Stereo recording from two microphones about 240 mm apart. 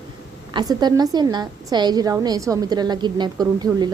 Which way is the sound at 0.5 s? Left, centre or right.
Centre.